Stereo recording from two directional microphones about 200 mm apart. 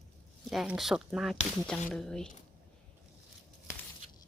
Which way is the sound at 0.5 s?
Centre (ahead or behind).